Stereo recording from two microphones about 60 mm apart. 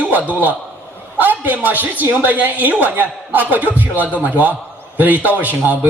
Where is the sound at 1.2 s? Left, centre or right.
Right.